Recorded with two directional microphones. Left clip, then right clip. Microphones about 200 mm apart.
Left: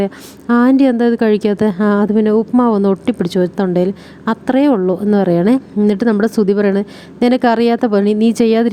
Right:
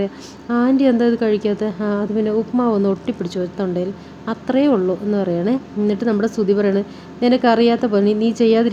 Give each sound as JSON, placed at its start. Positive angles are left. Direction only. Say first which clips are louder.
{"t": 0.0, "sound": "a woman's voice", "louder": "left 5 dB", "side_deg": 45}